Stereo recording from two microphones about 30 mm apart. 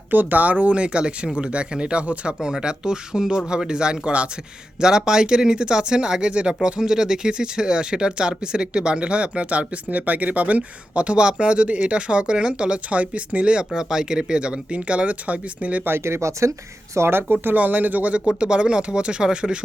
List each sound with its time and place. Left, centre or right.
0.1 s speech: right
0.7 s speech: right
2.4 s speech: right
4.0 s speech: right
4.8 s speech: right
12.9 s speech: right
13.4 s speech: right
13.7 s speech: right
17.3 s speech: right
18.1 s speech: right